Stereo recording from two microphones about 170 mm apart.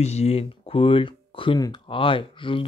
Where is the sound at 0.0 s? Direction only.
40° left (ahead or behind).